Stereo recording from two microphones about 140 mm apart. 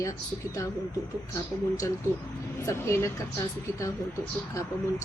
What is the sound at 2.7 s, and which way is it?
Speech, 20° left (ahead or behind).